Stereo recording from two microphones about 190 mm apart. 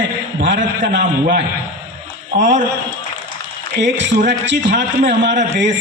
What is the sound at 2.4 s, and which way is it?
Speech, 40° right (ahead or behind).